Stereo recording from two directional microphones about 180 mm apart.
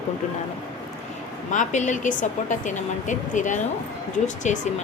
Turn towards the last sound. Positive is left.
turn(degrees=40)  # may be behind; listen again after turning